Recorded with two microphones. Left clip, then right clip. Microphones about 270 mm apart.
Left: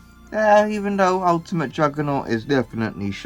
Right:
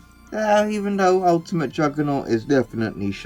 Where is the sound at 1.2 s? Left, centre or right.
Centre.